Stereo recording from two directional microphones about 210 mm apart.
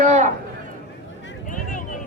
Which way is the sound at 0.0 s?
35° right (ahead or behind).